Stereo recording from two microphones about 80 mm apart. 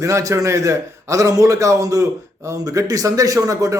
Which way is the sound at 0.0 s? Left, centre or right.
Right.